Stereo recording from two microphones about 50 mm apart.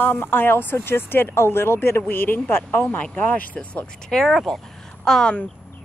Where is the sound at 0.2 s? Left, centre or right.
Left.